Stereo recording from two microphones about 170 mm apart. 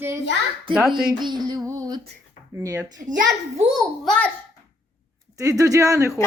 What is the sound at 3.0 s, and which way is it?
Speech, 50° right (ahead or behind).